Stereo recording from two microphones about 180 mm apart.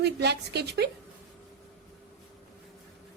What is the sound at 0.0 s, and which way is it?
Speech, 65° right (ahead or behind).